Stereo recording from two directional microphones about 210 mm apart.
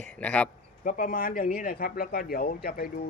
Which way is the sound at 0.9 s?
40° left (ahead or behind).